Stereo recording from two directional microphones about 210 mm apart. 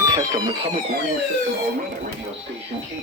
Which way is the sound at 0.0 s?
15° right (ahead or behind).